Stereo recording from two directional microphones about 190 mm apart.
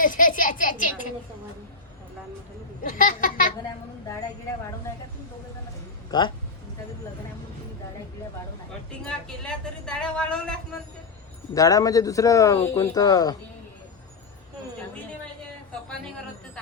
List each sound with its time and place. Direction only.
0.0 s a sound: 45° left (ahead or behind)
2.8 s speech: 45° left (ahead or behind)
6.1 s speech: 20° left (ahead or behind)
9.0 s speech: 5° left (ahead or behind)
11.5 s a man's voice: 20° left (ahead or behind)